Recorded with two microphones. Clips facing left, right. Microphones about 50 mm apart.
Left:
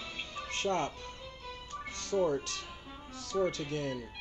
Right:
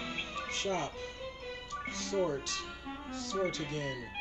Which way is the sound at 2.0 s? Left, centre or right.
Right.